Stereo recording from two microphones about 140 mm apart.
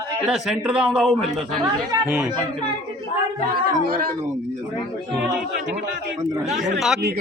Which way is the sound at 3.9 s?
85° right.